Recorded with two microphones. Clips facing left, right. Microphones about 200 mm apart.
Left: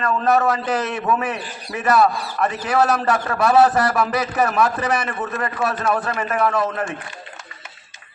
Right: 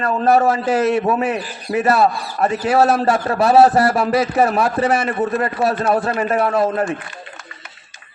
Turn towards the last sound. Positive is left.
turn(degrees=-30)  # may be behind; listen again after turning